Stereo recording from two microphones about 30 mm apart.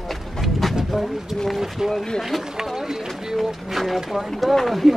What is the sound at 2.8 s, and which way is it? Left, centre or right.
Run, centre.